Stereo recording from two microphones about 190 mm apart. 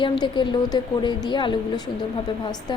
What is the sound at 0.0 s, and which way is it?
A woman's voice, 25° left (ahead or behind).